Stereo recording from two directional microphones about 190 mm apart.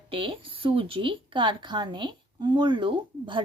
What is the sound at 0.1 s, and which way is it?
Speech, 30° right (ahead or behind).